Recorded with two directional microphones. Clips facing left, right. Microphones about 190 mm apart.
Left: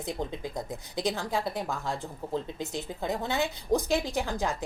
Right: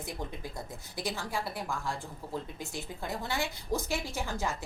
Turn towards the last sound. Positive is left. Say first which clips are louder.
# left 4 dB
turn(degrees=15)  # may be behind; listen again after turning